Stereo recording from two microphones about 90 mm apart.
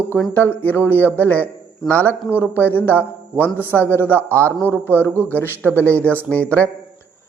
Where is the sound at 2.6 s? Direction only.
20° left (ahead or behind).